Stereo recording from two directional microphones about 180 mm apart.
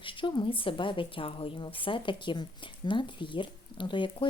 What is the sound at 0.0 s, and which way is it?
A woman's voice, 25° left (ahead or behind).